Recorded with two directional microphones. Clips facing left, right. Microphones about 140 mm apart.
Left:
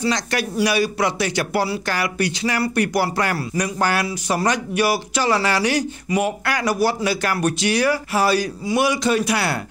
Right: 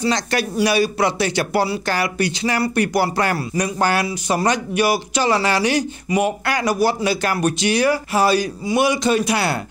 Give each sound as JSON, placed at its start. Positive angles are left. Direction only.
{"t": 0.0, "sound": "speech", "side_deg": -30}